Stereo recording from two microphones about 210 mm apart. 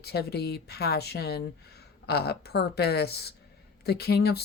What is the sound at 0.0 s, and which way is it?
Speech, 50° left (ahead or behind).